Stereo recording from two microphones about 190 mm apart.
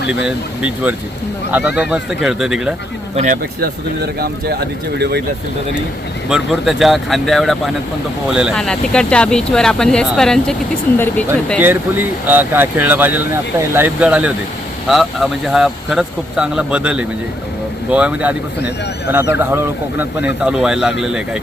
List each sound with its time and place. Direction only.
0.3 s speech: 5° right (ahead or behind)
3.6 s speech: 55° right (ahead or behind)
6.2 s speech: 5° right (ahead or behind)
11.6 s speech: 10° right (ahead or behind)